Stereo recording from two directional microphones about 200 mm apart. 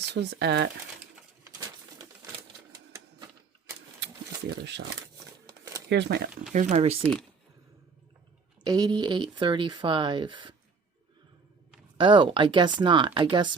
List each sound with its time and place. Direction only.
0.0 s speech: 60° right (ahead or behind)
1.5 s bird: 15° right (ahead or behind)
2.7 s typewriter: 20° right (ahead or behind)
4.6 s speech: 60° right (ahead or behind)
4.9 s crumpling: 15° right (ahead or behind)
5.9 s speech: 55° right (ahead or behind)
6.5 s speech: 35° right (ahead or behind)
8.6 s speech: 20° right (ahead or behind)
11.9 s speech: 25° right (ahead or behind)